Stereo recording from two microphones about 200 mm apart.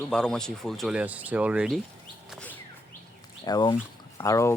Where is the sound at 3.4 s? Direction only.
20° left (ahead or behind).